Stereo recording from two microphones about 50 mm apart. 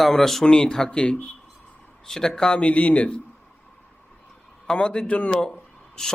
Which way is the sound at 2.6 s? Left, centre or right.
Left.